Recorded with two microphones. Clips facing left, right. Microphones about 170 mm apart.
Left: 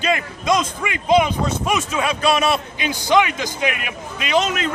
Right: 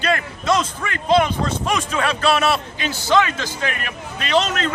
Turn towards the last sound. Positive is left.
turn(degrees=10)  # may be behind; listen again after turning